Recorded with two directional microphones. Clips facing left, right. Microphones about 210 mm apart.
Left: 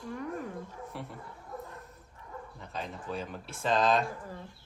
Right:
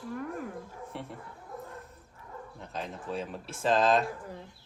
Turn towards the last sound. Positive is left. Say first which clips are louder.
# right 2 dB
turn(degrees=0)  # may be behind; listen again after turning